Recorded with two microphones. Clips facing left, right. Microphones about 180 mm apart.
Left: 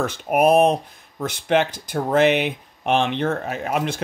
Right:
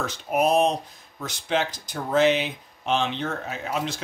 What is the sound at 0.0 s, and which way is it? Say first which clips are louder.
Speech: left 5 dB; 55° left (ahead or behind).